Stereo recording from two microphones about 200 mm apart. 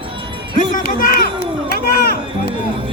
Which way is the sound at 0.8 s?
45° left (ahead or behind).